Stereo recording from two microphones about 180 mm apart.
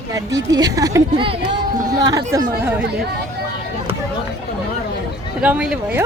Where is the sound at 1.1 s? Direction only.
30° right (ahead or behind).